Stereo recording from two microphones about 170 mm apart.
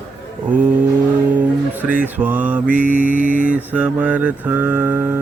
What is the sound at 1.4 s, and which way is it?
Music, 10° right (ahead or behind).